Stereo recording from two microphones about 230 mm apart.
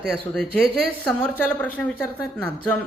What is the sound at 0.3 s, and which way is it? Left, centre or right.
Speech, centre.